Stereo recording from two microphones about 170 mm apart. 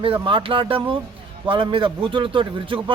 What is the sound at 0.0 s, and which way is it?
A man's voice, 30° right (ahead or behind).